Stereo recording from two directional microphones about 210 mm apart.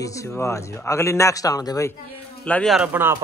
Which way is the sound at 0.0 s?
15° left (ahead or behind).